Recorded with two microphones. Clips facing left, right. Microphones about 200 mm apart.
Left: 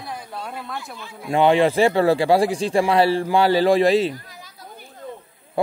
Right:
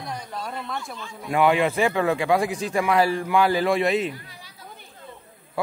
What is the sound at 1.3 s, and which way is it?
Speech, 30° left (ahead or behind).